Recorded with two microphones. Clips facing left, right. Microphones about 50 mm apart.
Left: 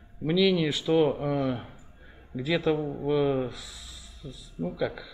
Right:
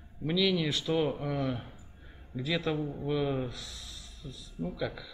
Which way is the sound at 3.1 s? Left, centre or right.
Centre.